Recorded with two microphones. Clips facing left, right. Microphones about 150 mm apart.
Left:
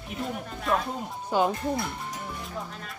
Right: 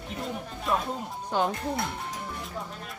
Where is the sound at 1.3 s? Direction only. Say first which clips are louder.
Left 3 dB; 5° left (ahead or behind).